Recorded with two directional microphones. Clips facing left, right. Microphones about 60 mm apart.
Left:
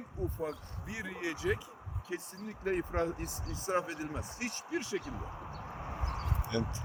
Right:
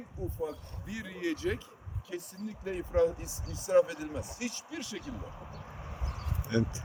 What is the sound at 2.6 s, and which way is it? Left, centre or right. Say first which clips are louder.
Speech: right 4 dB; left.